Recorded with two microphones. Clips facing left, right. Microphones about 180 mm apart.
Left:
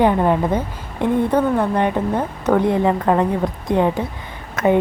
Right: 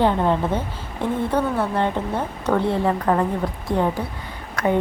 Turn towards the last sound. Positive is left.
turn(degrees=20)  # may be behind; listen again after turning